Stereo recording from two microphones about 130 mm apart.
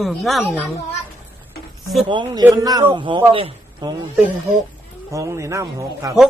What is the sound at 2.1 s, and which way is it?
A man's voice, 35° right (ahead or behind).